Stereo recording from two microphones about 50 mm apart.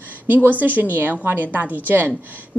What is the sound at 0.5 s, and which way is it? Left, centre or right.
A woman's voice, right.